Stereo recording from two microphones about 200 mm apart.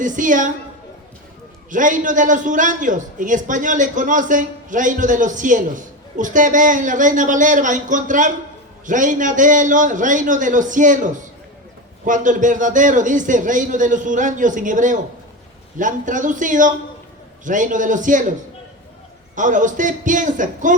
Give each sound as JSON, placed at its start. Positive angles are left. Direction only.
{"t": 0.0, "sound": "a man's voice", "side_deg": -40}
{"t": 1.7, "sound": "a man's voice", "side_deg": -40}
{"t": 19.4, "sound": "a man's voice", "side_deg": -40}